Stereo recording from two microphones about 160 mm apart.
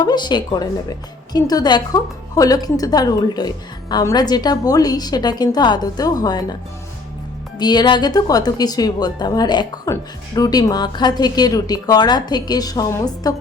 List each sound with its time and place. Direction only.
0.0 s a woman's voice: 25° left (ahead or behind)
7.6 s a woman's voice: 25° left (ahead or behind)